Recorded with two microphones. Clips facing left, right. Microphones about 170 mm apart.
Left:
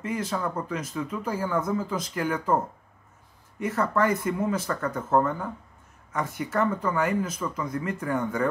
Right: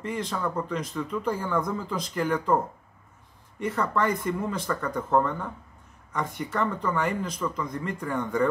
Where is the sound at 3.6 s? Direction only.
5° left (ahead or behind).